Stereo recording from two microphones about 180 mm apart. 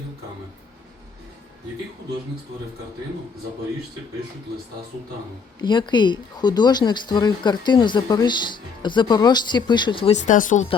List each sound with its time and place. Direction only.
5.5 s speech: 25° left (ahead or behind)
10.2 s speech: 45° left (ahead or behind)